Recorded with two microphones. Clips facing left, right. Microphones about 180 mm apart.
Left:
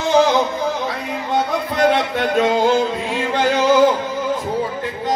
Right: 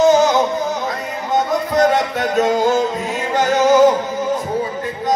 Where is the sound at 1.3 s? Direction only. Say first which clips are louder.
Right 4 dB; 45° right (ahead or behind).